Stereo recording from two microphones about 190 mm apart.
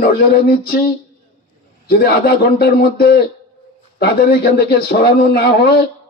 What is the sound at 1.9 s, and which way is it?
A man's voice, 55° left (ahead or behind).